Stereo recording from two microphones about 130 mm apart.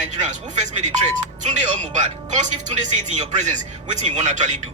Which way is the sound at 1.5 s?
65° right (ahead or behind).